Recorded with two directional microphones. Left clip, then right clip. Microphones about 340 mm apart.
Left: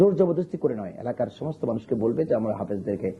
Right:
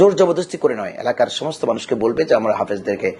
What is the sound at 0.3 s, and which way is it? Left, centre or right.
Speech, centre.